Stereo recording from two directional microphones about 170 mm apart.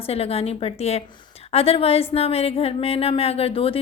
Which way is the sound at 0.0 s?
35° left (ahead or behind).